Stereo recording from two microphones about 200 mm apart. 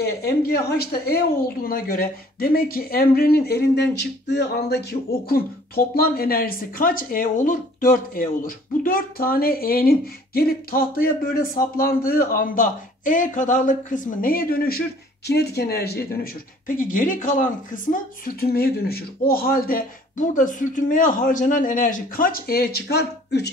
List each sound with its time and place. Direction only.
0.0 s speech: 55° left (ahead or behind)